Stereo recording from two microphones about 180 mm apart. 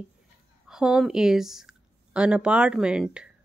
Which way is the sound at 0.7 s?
Centre (ahead or behind).